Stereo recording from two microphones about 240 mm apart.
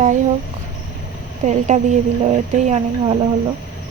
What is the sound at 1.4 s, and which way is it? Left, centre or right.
Speech, right.